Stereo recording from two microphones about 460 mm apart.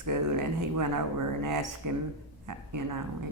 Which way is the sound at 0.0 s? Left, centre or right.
Right.